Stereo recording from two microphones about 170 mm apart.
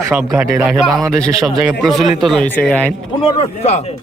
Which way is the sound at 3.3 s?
35° left (ahead or behind).